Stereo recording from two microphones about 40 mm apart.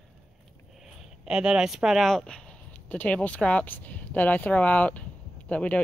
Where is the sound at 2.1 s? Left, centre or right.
Left.